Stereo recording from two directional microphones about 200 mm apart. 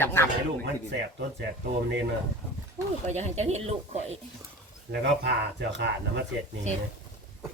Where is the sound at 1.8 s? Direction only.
60° right (ahead or behind).